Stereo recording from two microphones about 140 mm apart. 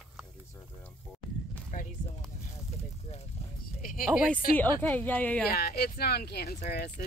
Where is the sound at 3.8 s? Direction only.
90° left.